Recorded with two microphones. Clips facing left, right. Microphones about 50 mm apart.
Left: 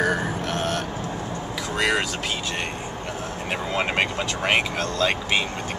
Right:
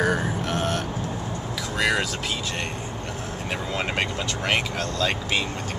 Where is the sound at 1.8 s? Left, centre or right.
Centre.